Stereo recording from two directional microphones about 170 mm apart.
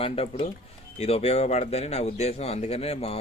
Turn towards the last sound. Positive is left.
turn(degrees=35)  # may be behind; listen again after turning